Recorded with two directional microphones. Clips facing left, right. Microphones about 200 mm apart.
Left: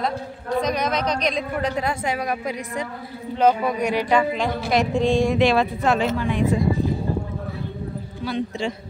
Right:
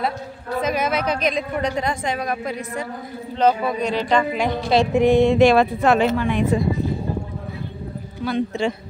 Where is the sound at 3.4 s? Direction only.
10° left (ahead or behind).